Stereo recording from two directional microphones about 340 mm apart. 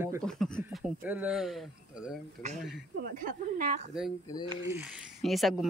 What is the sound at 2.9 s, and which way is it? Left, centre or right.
Speech, right.